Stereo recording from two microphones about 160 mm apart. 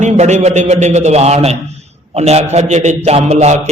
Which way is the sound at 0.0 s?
45° right (ahead or behind).